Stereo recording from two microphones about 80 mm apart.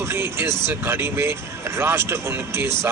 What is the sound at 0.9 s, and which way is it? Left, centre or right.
Speech, right.